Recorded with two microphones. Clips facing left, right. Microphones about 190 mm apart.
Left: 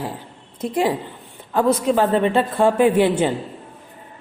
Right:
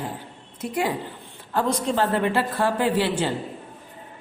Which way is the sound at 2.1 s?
20° left (ahead or behind).